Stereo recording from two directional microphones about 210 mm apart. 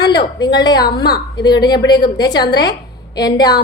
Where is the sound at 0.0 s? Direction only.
20° left (ahead or behind).